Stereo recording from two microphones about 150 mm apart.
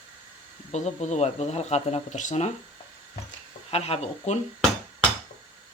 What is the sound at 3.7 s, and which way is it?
Speech, 40° left (ahead or behind).